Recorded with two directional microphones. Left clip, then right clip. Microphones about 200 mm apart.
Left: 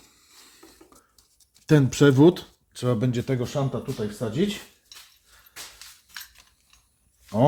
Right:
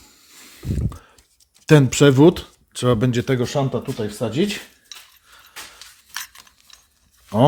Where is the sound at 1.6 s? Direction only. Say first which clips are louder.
Right 5 dB; 20° right (ahead or behind).